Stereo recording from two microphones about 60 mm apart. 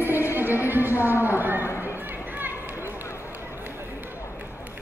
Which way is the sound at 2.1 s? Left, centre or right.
Right.